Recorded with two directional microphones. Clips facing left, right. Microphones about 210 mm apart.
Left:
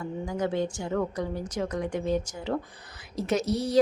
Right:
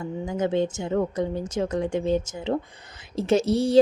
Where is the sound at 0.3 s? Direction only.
20° right (ahead or behind).